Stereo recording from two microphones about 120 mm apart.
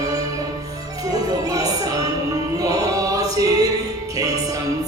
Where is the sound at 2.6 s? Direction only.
30° right (ahead or behind).